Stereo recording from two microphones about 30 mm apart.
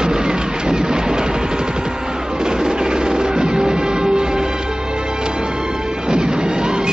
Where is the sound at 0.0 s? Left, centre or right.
Right.